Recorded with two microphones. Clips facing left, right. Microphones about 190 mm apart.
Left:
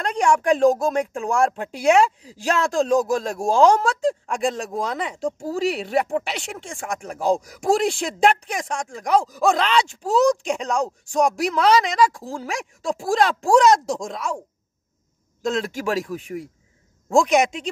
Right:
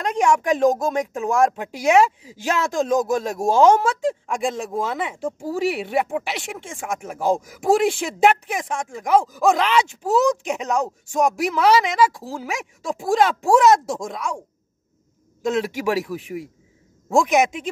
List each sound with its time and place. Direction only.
0.0 s speech: 5° right (ahead or behind)
0.4 s speech: 20° right (ahead or behind)
2.7 s speech: 20° right (ahead or behind)
3.3 s speech: centre (ahead or behind)
15.4 s speech: 5° right (ahead or behind)